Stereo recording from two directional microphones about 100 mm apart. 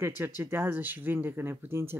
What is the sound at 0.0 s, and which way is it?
Speech, 25° right (ahead or behind).